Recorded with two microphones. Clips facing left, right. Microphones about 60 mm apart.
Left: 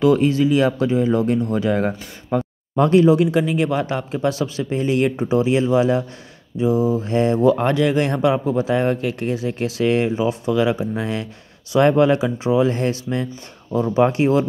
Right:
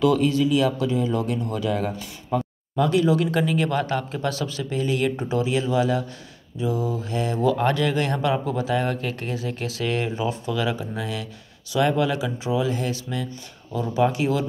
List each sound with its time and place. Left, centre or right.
0.0 s speech: left
3.2 s speech: centre